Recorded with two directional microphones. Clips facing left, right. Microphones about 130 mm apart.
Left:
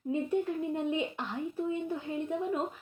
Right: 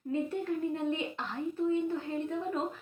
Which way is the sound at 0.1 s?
15° left (ahead or behind).